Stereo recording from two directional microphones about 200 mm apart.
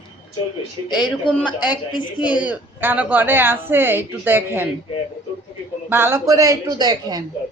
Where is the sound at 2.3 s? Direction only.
5° right (ahead or behind).